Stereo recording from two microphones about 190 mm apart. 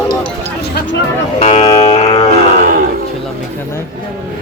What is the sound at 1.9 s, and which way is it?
Music, 35° left (ahead or behind).